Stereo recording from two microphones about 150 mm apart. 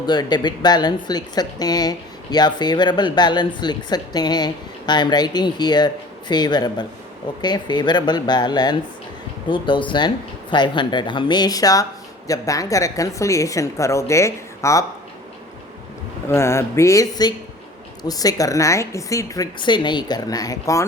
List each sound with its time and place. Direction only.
0.0 s speech: 30° left (ahead or behind)
16.3 s speech: 20° left (ahead or behind)